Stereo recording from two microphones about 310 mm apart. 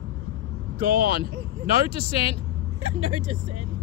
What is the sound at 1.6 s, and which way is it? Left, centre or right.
Speech, centre.